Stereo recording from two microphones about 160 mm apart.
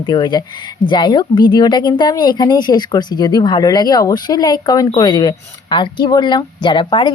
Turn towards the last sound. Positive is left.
turn(degrees=30)  # may be behind; listen again after turning